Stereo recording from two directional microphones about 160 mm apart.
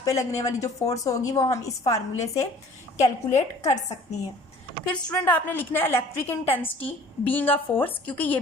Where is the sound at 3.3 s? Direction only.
45° left (ahead or behind).